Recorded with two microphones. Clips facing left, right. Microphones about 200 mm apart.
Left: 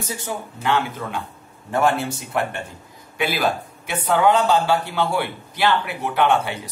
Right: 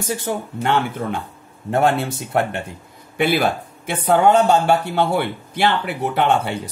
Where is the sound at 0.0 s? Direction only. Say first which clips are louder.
Right 5 dB; 60° right (ahead or behind).